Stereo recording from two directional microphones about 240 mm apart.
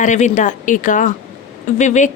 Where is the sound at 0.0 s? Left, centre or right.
Left.